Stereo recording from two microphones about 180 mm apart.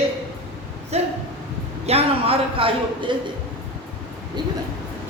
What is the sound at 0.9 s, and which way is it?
A man's voice, 35° right (ahead or behind).